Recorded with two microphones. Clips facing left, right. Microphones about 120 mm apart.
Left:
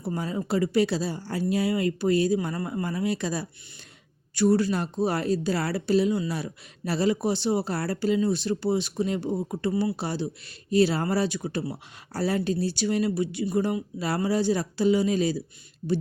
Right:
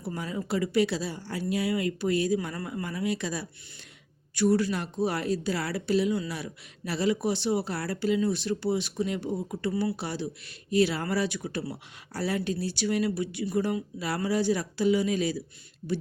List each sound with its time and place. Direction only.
0.0 s speech: 30° left (ahead or behind)